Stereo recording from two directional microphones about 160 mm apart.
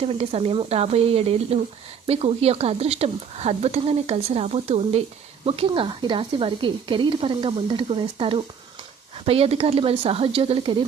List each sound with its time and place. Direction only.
0.0 s speech: 40° right (ahead or behind)